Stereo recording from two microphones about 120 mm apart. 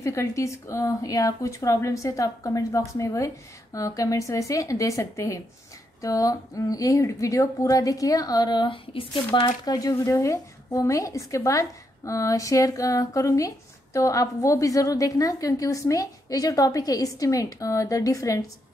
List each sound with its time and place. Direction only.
0.0 s a woman's voice: 25° left (ahead or behind)